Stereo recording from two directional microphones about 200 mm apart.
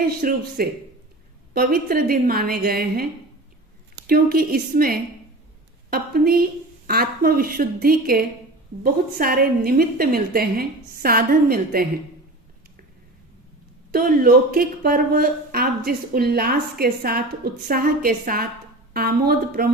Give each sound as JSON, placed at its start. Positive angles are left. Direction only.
{"t": 0.2, "sound": "speech", "side_deg": -45}
{"t": 13.9, "sound": "speech", "side_deg": -45}